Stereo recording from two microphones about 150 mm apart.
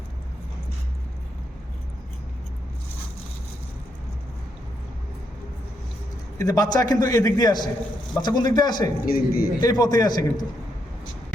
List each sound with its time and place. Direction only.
6.4 s a man's voice: 25° left (ahead or behind)
9.0 s a man's voice: 80° left
9.6 s a man's voice: 25° left (ahead or behind)